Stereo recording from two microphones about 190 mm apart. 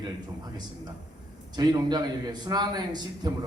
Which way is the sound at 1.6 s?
20° right (ahead or behind).